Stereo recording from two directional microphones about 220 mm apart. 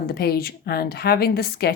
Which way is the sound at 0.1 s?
45° left (ahead or behind).